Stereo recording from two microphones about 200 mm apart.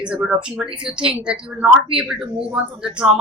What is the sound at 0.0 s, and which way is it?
Speech, 5° right (ahead or behind).